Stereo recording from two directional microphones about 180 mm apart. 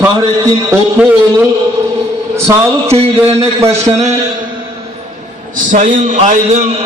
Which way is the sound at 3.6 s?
15° right (ahead or behind).